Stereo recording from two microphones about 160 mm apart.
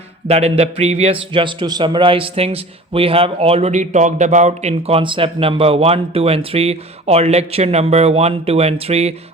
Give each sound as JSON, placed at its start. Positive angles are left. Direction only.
{"t": 0.3, "sound": "a man's voice", "side_deg": -40}